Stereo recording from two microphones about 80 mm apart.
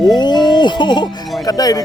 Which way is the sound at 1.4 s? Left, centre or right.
Left.